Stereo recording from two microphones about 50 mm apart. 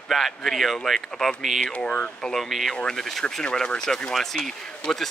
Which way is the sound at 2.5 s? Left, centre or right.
Centre.